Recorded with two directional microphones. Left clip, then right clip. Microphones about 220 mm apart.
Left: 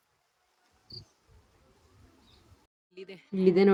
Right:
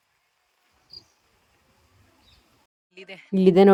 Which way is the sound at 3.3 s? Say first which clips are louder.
Right 7 dB; 30° right (ahead or behind).